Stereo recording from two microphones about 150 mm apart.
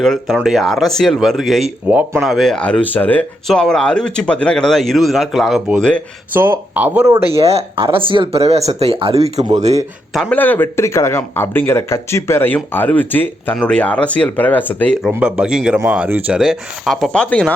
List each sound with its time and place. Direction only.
0.0 s speech: centre (ahead or behind)
6.3 s speech: 15° right (ahead or behind)
7.3 s speech: 40° right (ahead or behind)
10.1 s speech: centre (ahead or behind)
10.3 s speech: 10° left (ahead or behind)
15.1 s speech: 5° right (ahead or behind)